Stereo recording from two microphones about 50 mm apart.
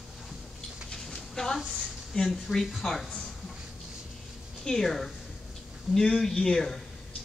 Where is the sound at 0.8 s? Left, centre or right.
Centre.